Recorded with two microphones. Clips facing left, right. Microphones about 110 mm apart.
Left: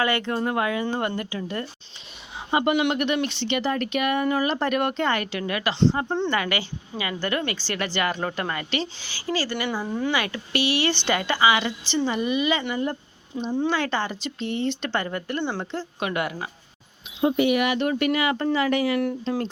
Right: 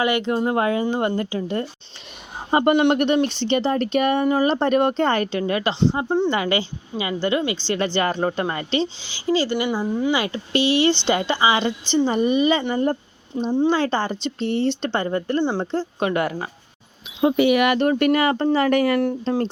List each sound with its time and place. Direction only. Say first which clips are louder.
0.0 s speech: right 3 dB; 20° right (ahead or behind)
2.5 s speech: right 5 dB; 40° right (ahead or behind); by 9.6 s 25° right (ahead or behind)
9.6 s speech: right 4 dB; 10° right (ahead or behind)
10.1 s speech: right 4 dB; 25° right (ahead or behind)
17.2 s speech: right 4 dB; 90° right
17.7 s speech: right 5 dB; 45° right (ahead or behind)
18.9 s speech: right 4 dB; 35° right (ahead or behind)